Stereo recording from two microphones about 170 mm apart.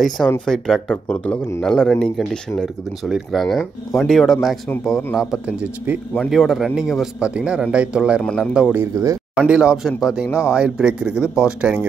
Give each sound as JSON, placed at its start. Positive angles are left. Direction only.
{"t": 0.5, "sound": "speech", "side_deg": 0}
{"t": 8.2, "sound": "speech", "side_deg": 5}
{"t": 8.5, "sound": "speech", "side_deg": -5}
{"t": 9.0, "sound": "speech", "side_deg": -20}
{"t": 9.5, "sound": "speech", "side_deg": -5}